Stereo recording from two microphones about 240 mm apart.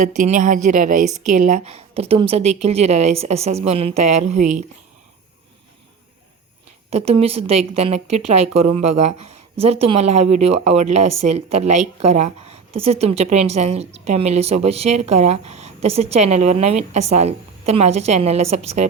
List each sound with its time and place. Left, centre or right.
0.2 s a woman's voice: right
6.9 s a woman's voice: right